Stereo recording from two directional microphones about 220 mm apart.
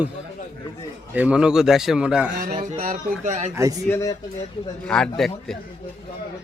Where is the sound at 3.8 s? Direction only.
10° left (ahead or behind).